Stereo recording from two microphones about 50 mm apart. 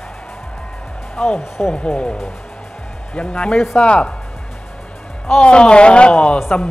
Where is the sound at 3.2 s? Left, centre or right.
Centre.